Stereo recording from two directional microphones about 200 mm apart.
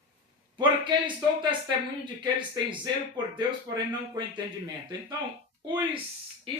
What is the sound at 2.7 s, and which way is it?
Speech, 20° right (ahead or behind).